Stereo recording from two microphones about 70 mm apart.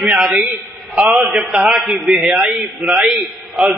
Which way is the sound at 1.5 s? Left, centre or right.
Centre.